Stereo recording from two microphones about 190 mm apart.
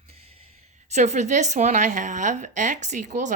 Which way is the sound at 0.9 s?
35° right (ahead or behind).